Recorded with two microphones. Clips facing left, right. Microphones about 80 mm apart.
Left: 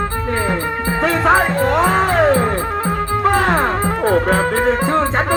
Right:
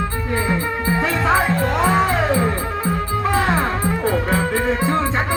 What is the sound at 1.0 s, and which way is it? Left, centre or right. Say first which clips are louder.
Music: left 5 dB; left.